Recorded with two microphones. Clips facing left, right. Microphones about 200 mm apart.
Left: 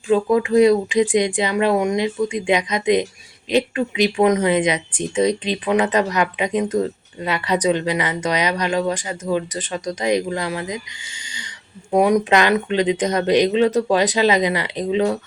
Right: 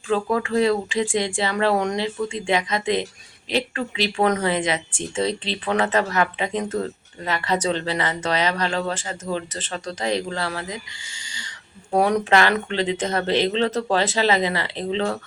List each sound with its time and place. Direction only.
0.1 s speech: 15° left (ahead or behind)
11.9 s speech: 10° left (ahead or behind)